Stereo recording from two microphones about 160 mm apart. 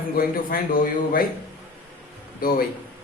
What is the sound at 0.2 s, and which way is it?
Speech, 65° left (ahead or behind).